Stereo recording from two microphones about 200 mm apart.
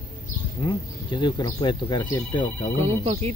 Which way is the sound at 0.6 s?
20° left (ahead or behind).